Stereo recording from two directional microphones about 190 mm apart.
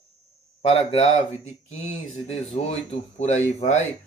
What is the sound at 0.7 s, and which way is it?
Speech, 35° left (ahead or behind).